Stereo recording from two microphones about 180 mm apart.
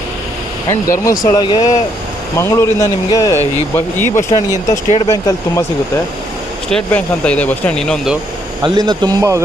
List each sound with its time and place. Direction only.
0.7 s speech: 15° left (ahead or behind)
4.9 s speech: 35° left (ahead or behind)
6.7 s speech: 5° left (ahead or behind)
8.6 s speech: 25° right (ahead or behind)